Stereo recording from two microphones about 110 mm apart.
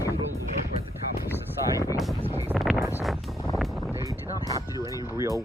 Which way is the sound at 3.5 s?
Centre (ahead or behind).